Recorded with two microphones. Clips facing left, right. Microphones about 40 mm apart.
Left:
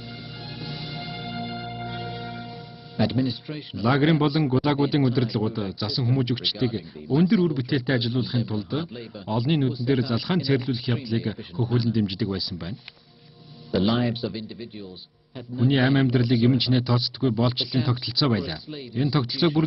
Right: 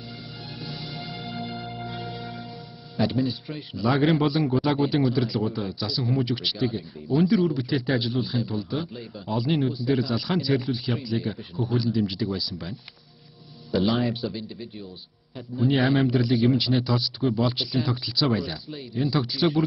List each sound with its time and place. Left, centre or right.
0.7 s music: centre
1.0 s music: centre
2.1 s speech: centre
13.7 s speech: centre